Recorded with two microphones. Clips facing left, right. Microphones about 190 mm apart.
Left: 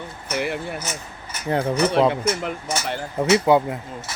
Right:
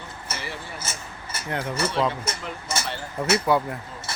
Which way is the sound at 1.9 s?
60° left (ahead or behind).